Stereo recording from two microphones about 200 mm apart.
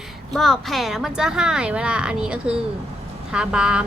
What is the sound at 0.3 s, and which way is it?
Speech, centre (ahead or behind).